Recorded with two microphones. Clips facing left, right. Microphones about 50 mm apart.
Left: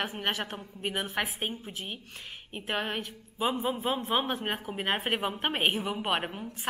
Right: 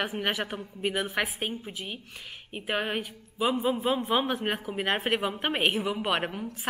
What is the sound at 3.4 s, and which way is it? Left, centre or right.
Speech, centre.